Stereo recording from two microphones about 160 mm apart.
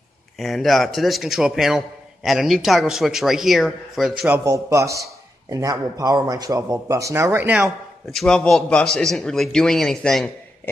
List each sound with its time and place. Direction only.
0.4 s a man's voice: centre (ahead or behind)
4.5 s a man's voice: 20° right (ahead or behind)
8.1 s a man's voice: 5° left (ahead or behind)